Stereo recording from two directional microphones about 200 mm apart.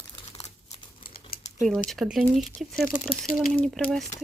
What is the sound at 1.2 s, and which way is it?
Typing, 25° left (ahead or behind).